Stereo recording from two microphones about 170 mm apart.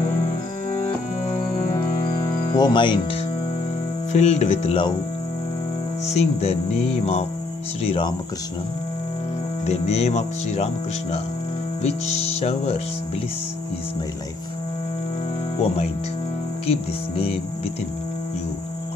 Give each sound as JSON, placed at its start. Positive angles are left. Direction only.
{"t": 2.5, "sound": "speech", "side_deg": 25}
{"t": 4.1, "sound": "speech", "side_deg": 40}
{"t": 6.0, "sound": "speech", "side_deg": 40}
{"t": 9.7, "sound": "speech", "side_deg": 40}
{"t": 15.6, "sound": "speech", "side_deg": 35}